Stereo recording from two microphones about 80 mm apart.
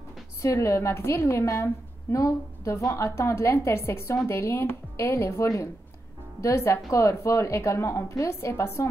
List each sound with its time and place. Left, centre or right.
0.4 s a woman's voice: left